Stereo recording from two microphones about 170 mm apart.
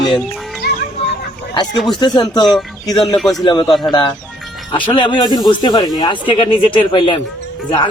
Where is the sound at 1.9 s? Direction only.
25° left (ahead or behind).